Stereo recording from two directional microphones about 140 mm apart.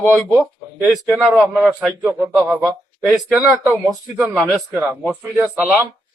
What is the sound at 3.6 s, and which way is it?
A man's voice, 5° right (ahead or behind).